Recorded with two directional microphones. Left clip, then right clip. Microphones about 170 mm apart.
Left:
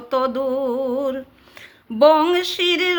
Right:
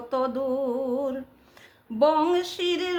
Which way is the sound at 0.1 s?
25° left (ahead or behind).